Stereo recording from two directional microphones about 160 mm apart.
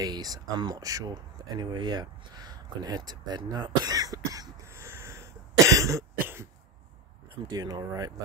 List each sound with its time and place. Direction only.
0.0 s speech: 25° right (ahead or behind)
7.5 s speech: 25° right (ahead or behind)